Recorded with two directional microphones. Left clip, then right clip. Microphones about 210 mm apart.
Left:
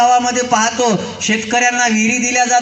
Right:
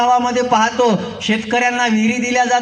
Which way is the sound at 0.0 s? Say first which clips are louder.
Left 2 dB; 20° left (ahead or behind).